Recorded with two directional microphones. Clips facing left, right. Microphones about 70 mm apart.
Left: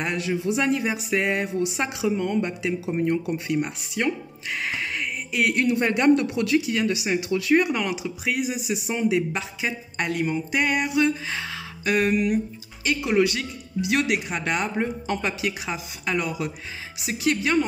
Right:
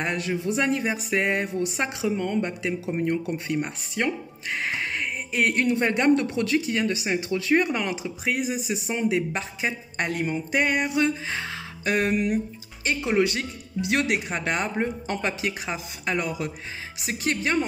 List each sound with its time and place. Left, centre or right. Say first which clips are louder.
0.0 s speech: left 1 dB; right